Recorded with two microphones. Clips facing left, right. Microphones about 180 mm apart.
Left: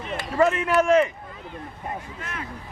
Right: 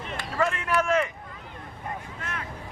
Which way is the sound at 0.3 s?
20° left (ahead or behind).